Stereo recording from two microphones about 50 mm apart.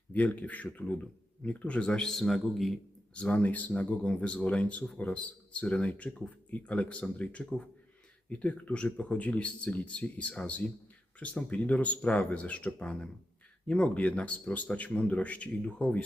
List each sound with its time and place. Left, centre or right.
0.1 s speech: left
2.0 s a man's voice: centre
3.2 s speech: left
3.4 s speech: left